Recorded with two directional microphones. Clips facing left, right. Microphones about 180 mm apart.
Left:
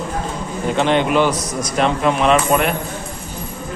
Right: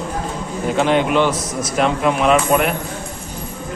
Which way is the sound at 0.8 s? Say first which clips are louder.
Even; 5° right (ahead or behind).